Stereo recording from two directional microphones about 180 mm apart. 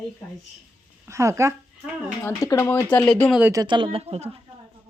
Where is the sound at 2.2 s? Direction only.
20° left (ahead or behind).